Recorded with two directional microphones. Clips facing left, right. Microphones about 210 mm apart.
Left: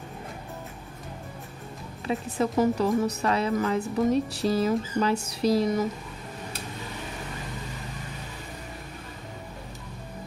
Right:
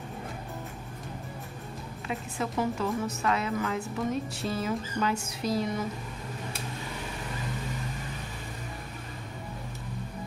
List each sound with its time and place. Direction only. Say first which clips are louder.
2.0 s a woman's voice: left 7 dB; 40° left (ahead or behind)